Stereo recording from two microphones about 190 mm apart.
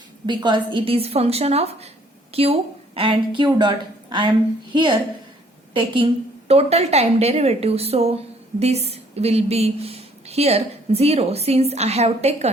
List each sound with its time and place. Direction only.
0.3 s a woman's voice: 25° right (ahead or behind)